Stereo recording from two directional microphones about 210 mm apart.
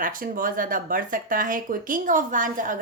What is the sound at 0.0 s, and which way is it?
A woman's voice, 40° right (ahead or behind).